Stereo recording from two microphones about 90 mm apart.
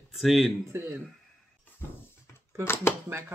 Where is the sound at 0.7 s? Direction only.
25° right (ahead or behind).